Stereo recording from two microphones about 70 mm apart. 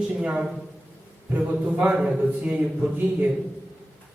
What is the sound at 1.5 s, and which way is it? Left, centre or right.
A man's voice, centre.